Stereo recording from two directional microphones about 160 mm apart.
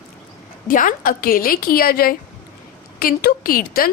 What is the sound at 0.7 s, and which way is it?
A woman's voice, 55° left (ahead or behind).